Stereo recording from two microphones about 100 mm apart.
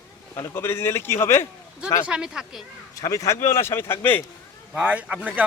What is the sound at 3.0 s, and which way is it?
Speech, 35° left (ahead or behind).